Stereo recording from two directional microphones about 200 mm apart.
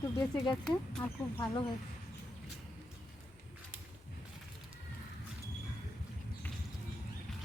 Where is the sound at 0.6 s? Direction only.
5° left (ahead or behind).